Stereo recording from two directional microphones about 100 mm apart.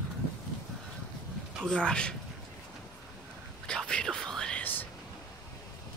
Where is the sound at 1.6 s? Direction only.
10° left (ahead or behind).